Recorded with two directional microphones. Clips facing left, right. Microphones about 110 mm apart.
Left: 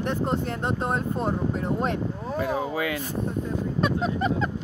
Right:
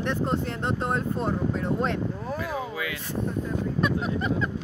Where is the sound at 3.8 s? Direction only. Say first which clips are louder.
Left 3 dB; 25° left (ahead or behind).